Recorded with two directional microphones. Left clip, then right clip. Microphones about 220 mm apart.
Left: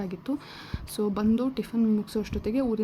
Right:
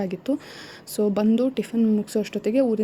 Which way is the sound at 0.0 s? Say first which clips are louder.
Right 7 dB; 20° right (ahead or behind).